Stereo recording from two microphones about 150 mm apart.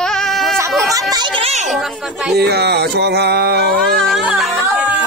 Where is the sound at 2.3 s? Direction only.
90° right.